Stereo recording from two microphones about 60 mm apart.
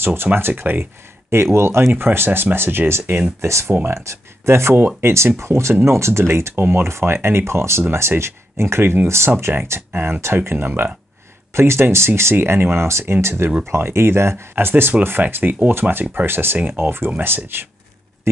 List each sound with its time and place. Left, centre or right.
0.0 s speech: right
1.3 s speech: right
3.3 s speech: right
14.5 s speech: right